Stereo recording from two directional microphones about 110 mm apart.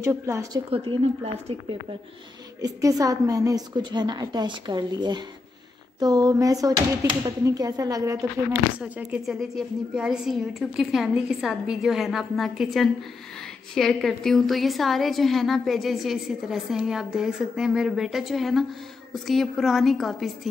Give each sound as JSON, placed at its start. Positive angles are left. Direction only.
{"t": 0.0, "sound": "a woman's voice", "side_deg": -25}
{"t": 0.7, "sound": "a woman's voice", "side_deg": -55}
{"t": 2.6, "sound": "speech", "side_deg": -30}
{"t": 8.7, "sound": "speech", "side_deg": -10}
{"t": 9.2, "sound": "a woman's voice", "side_deg": 0}